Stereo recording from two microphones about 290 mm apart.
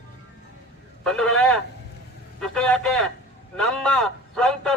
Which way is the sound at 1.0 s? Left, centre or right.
Centre.